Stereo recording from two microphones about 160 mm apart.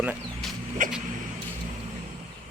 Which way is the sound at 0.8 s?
60° right (ahead or behind).